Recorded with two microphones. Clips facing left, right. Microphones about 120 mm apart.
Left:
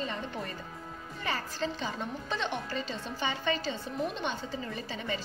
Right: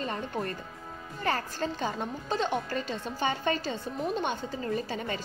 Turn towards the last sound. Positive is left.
turn(degrees=-50)  # may be behind; listen again after turning